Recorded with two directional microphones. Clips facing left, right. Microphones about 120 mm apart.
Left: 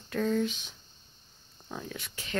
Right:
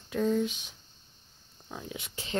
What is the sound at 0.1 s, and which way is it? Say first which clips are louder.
Speech: right 1 dB; 10° right (ahead or behind).